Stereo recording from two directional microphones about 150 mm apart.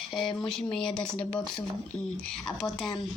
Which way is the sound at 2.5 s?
Centre (ahead or behind).